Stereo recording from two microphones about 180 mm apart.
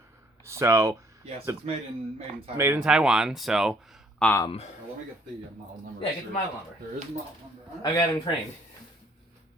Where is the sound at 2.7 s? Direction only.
5° right (ahead or behind).